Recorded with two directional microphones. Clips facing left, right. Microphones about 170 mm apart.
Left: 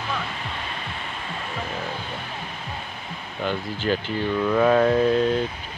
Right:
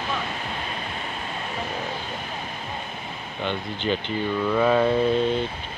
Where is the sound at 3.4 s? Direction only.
5° left (ahead or behind).